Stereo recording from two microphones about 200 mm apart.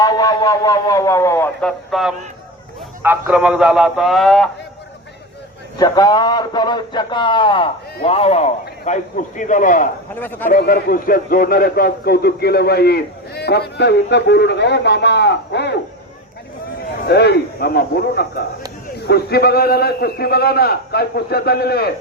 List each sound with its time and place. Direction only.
0.0 s a man's voice: 20° left (ahead or behind)
1.9 s speech: centre (ahead or behind)
5.8 s a man's voice: 20° left (ahead or behind); by 9.9 s 40° left (ahead or behind)
10.2 s a man's voice: 10° left (ahead or behind)
10.5 s a man's voice: 45° left (ahead or behind)
17.1 s a man's voice: 55° left (ahead or behind)